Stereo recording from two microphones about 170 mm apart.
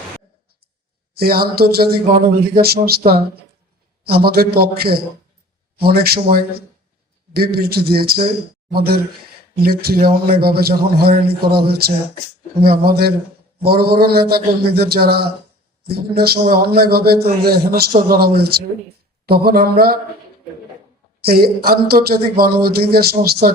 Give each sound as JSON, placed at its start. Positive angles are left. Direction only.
{"t": 1.1, "sound": "a man's voice", "side_deg": -65}
{"t": 4.0, "sound": "a man's voice", "side_deg": -65}
{"t": 21.2, "sound": "a man's voice", "side_deg": -65}